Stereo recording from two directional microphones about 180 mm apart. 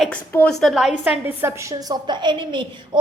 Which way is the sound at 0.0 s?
5° left (ahead or behind).